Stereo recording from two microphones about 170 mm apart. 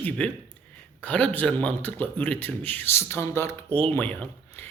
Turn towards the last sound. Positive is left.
turn(degrees=10)  # may be behind; listen again after turning